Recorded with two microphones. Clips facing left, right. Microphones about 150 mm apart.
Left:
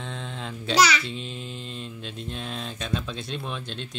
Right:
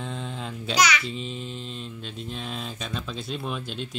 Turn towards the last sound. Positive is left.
turn(degrees=-5)  # may be behind; listen again after turning